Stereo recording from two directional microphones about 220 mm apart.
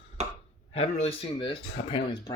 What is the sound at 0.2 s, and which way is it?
Chopping, 30° right (ahead or behind).